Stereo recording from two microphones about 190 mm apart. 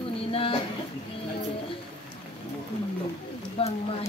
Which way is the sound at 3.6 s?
30° left (ahead or behind).